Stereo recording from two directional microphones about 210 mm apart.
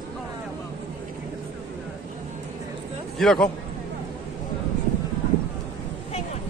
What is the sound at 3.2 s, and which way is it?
Speech, centre (ahead or behind).